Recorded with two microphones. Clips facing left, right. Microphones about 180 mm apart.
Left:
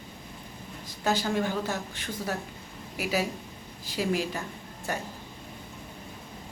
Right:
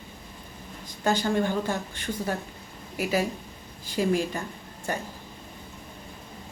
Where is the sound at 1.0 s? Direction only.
5° left (ahead or behind).